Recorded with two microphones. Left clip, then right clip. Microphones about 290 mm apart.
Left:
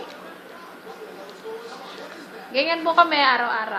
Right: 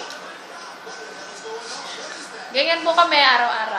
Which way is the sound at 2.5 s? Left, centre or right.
Centre.